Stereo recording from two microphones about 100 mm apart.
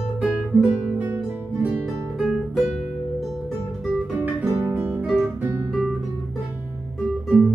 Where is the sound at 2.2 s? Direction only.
5° right (ahead or behind).